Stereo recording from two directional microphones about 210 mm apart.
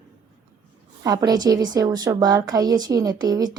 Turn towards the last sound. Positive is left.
turn(degrees=-15)  # may be behind; listen again after turning